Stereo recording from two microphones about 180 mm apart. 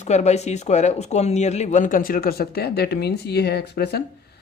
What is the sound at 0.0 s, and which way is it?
Speech, 40° left (ahead or behind).